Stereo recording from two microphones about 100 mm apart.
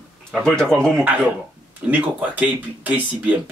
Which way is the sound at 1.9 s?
15° right (ahead or behind).